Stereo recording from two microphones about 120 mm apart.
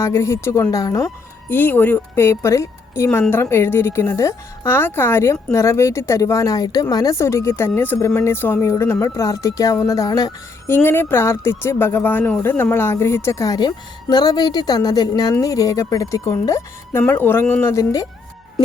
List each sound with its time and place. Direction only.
0.0 s a woman's voice: 25° left (ahead or behind)
1.5 s a woman's voice: 15° left (ahead or behind); by 10.3 s 30° left (ahead or behind)
10.7 s a woman's voice: 20° left (ahead or behind)